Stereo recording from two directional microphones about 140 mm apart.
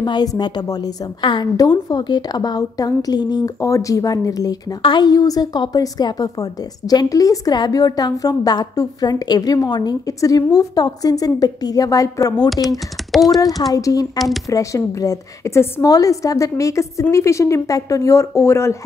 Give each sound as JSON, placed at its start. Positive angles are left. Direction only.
{"t": 0.0, "sound": "a woman's voice", "side_deg": 30}
{"t": 12.6, "sound": "speech", "side_deg": 0}
{"t": 13.6, "sound": "a woman's voice", "side_deg": 25}